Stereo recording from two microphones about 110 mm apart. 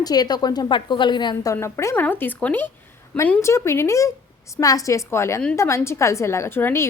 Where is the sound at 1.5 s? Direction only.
25° left (ahead or behind).